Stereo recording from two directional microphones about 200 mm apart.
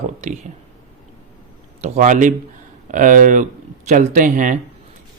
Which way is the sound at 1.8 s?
40° right (ahead or behind).